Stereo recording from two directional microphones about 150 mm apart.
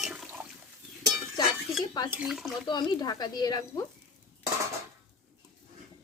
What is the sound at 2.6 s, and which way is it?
Speech, 30° left (ahead or behind).